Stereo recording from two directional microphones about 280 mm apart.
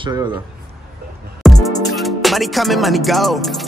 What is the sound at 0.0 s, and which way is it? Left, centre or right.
Speech, centre.